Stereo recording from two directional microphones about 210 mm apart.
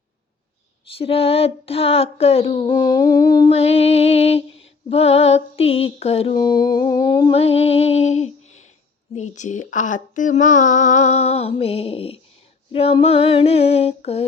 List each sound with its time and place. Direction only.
0.9 s lullaby: 25° left (ahead or behind)
3.5 s lullaby: 30° left (ahead or behind)
9.1 s speech: 35° left (ahead or behind)
12.7 s lullaby: 25° left (ahead or behind)